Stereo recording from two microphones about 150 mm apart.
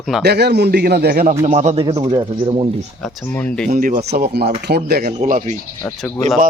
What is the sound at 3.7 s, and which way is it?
A man's voice, 65° right (ahead or behind).